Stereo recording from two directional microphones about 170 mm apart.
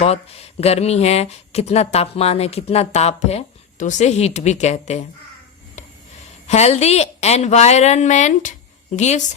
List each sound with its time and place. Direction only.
0.0 s speech: 35° left (ahead or behind)
6.5 s speech: 40° left (ahead or behind)